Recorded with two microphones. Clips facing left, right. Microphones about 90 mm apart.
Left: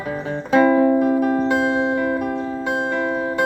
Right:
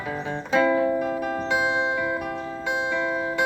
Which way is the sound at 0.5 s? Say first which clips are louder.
Left 6 dB; 40° left (ahead or behind).